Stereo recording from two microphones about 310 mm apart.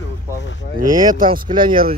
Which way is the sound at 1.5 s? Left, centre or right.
Centre.